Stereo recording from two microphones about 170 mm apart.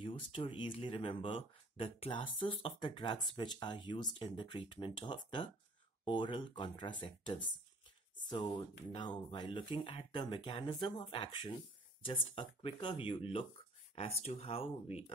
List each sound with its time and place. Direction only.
0.0 s speech: 30° left (ahead or behind)